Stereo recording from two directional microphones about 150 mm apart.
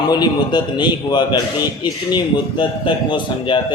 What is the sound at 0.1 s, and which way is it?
A man's voice, 30° left (ahead or behind).